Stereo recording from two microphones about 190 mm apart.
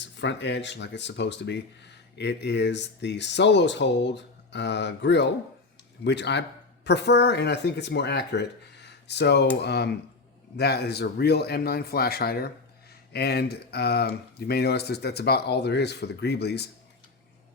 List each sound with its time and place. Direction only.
0.0 s speech: 70° left (ahead or behind)